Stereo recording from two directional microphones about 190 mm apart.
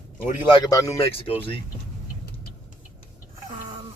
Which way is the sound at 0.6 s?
20° left (ahead or behind).